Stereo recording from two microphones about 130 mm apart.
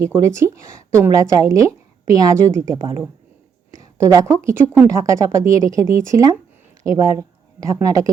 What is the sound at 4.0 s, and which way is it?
Speech, 20° right (ahead or behind).